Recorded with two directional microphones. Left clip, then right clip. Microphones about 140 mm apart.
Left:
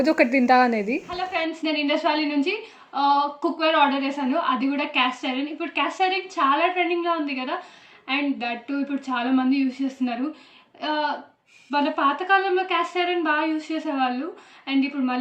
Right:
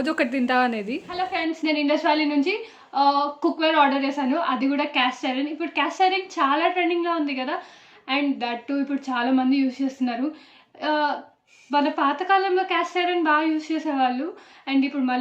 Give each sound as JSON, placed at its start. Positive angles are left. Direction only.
{"t": 0.0, "sound": "a woman's voice", "side_deg": 30}
{"t": 1.1, "sound": "a woman's voice", "side_deg": 0}